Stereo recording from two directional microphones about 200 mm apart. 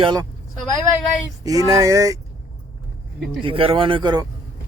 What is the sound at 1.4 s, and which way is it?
Speech, 15° right (ahead or behind).